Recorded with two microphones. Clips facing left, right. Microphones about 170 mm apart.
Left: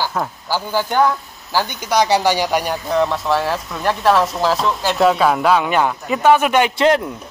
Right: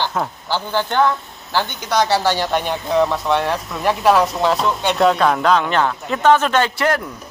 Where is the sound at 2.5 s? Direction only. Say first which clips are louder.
Even; centre (ahead or behind).